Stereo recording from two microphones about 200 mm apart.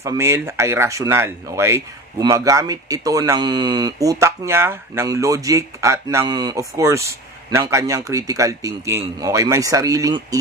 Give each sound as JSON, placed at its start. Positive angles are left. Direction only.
{"t": 0.0, "sound": "speech", "side_deg": -15}